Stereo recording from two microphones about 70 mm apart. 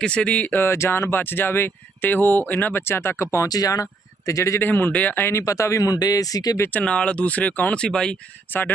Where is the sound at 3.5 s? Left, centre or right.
Left.